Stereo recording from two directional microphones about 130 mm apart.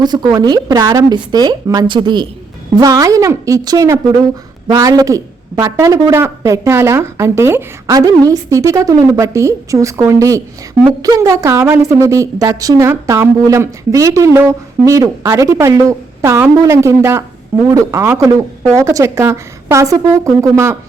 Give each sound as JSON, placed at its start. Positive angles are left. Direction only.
{"t": 0.0, "sound": "a woman's voice", "side_deg": -35}